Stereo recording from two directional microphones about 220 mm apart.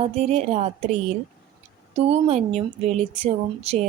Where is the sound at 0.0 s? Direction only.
30° right (ahead or behind).